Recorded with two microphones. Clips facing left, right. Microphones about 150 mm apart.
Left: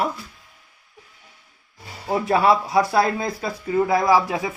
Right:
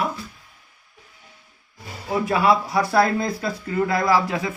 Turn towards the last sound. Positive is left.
turn(degrees=15)  # may be behind; listen again after turning